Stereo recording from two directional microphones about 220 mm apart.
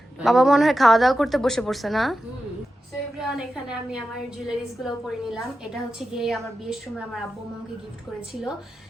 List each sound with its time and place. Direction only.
0.2 s a woman's voice: centre (ahead or behind)
3.2 s a woman's voice: centre (ahead or behind)
8.3 s a woman's voice: centre (ahead or behind)